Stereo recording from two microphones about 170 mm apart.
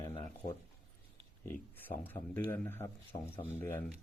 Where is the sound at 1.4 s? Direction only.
10° left (ahead or behind).